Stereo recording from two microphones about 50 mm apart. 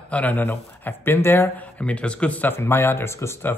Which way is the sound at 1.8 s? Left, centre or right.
Left.